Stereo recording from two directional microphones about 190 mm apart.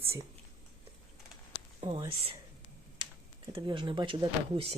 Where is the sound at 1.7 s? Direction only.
30° right (ahead or behind).